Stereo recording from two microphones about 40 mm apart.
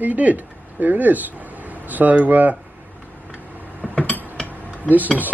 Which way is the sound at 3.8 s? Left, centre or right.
Left.